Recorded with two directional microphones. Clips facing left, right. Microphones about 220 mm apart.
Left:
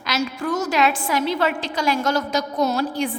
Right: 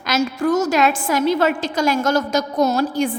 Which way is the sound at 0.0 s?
45° right (ahead or behind).